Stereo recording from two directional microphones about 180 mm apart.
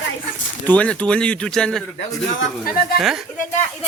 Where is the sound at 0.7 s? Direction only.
5° left (ahead or behind).